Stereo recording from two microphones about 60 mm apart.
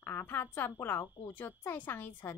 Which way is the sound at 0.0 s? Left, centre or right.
Left.